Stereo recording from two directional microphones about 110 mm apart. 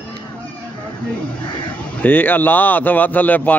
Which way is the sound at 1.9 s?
15° left (ahead or behind).